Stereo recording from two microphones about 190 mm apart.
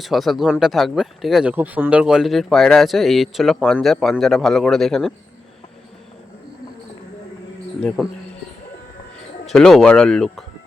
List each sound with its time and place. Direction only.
0.0 s speech: centre (ahead or behind)
7.8 s speech: centre (ahead or behind)
9.5 s speech: centre (ahead or behind)